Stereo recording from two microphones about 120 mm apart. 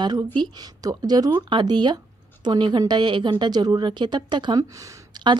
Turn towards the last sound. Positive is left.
turn(degrees=-35)  # may be behind; listen again after turning